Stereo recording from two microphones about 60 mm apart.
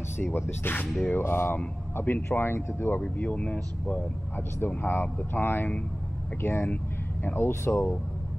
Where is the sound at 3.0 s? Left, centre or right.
Left.